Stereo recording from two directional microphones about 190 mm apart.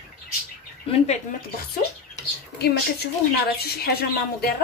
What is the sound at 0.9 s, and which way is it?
Speech, 35° left (ahead or behind).